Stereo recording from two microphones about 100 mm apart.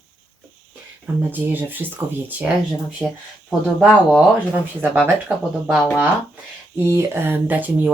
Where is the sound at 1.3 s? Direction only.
20° right (ahead or behind).